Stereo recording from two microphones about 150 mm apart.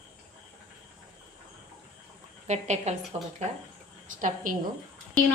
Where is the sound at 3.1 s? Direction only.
40° right (ahead or behind).